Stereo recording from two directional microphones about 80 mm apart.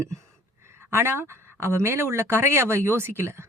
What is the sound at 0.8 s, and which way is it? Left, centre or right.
Speech, right.